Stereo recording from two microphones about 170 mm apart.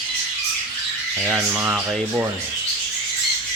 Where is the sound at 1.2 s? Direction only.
5° right (ahead or behind).